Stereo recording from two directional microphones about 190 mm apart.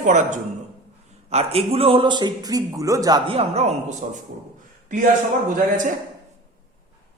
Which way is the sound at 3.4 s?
35° right (ahead or behind).